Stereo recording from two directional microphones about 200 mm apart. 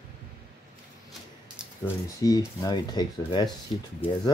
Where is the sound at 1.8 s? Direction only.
20° left (ahead or behind).